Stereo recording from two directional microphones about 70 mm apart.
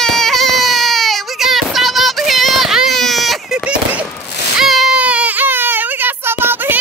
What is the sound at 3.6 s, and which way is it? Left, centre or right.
Fireworks, centre.